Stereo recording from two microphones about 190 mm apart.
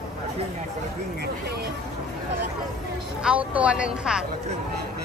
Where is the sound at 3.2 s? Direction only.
5° right (ahead or behind).